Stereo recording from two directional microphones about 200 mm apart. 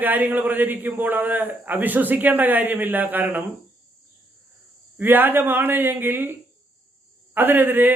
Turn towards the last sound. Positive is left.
turn(degrees=-10)  # may be behind; listen again after turning